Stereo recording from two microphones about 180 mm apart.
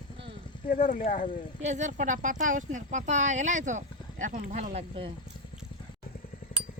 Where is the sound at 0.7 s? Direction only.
45° left (ahead or behind).